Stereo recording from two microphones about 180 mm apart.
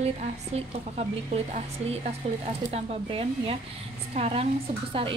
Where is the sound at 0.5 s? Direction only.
35° right (ahead or behind).